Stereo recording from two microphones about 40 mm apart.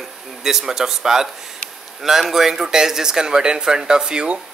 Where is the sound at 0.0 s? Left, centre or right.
Centre.